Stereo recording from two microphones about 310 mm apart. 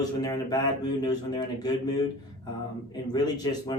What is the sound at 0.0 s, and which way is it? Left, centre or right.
Speech, centre.